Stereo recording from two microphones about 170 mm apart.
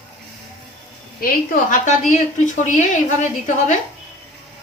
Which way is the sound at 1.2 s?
55° left (ahead or behind).